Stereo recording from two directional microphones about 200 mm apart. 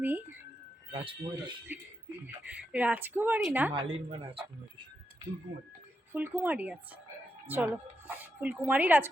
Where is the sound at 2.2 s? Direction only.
10° right (ahead or behind).